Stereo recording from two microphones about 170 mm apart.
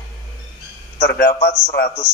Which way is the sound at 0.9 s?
75° left (ahead or behind).